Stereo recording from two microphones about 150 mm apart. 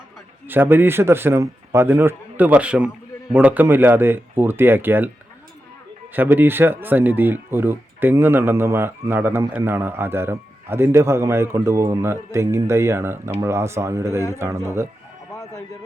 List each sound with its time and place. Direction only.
0.4 s speech: 15° right (ahead or behind)
6.1 s speech: 10° right (ahead or behind)